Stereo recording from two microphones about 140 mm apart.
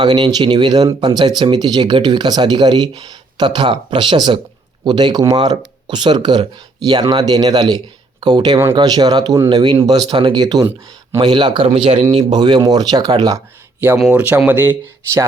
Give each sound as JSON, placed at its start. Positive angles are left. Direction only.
{"t": 0.0, "sound": "speech", "side_deg": -30}
{"t": 12.3, "sound": "speech", "side_deg": -35}
{"t": 14.0, "sound": "speech", "side_deg": -10}